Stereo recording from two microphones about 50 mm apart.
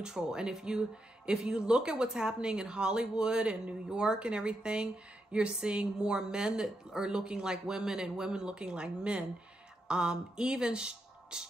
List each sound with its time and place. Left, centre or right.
0.0 s speech: centre